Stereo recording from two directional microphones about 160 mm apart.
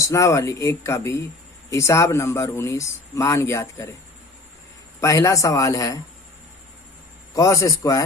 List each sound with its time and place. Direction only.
0.0 s speech: 20° left (ahead or behind)
4.9 s speech: 20° left (ahead or behind)
7.3 s speech: 20° left (ahead or behind)